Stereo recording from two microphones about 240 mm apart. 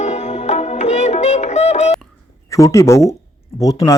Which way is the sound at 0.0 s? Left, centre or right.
Left.